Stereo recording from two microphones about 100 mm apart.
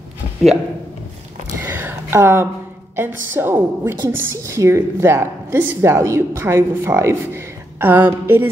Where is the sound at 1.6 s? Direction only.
20° right (ahead or behind).